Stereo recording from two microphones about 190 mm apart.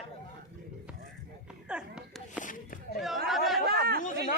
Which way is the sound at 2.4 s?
45° left (ahead or behind).